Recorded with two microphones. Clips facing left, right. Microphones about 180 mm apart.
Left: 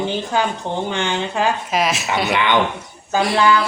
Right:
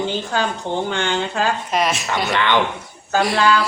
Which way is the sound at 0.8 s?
15° left (ahead or behind).